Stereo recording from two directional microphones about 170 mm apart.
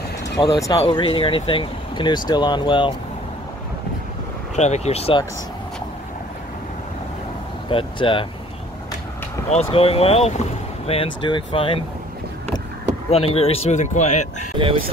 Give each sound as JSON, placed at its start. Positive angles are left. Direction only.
{"t": 0.4, "sound": "speech", "side_deg": 25}
{"t": 4.6, "sound": "a man's voice", "side_deg": 40}
{"t": 7.7, "sound": "speech", "side_deg": 30}
{"t": 9.5, "sound": "a man's voice", "side_deg": 35}
{"t": 13.1, "sound": "a man's voice", "side_deg": 35}